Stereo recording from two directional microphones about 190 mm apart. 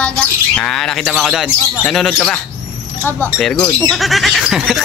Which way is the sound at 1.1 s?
Centre (ahead or behind).